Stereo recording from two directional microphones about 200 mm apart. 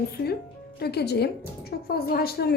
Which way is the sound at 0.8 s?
55° left (ahead or behind).